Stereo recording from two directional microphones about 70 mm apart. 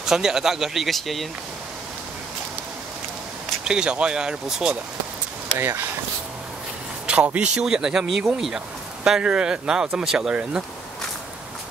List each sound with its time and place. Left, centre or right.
0.0 s speech: centre
3.6 s speech: centre
5.6 s speech: right
7.3 s speech: centre